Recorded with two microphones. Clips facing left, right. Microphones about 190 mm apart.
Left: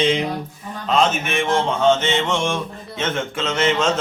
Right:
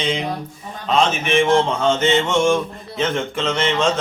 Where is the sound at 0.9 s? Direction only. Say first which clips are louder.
Right 1 dB; centre (ahead or behind).